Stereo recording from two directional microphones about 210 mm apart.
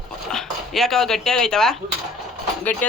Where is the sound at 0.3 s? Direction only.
Centre (ahead or behind).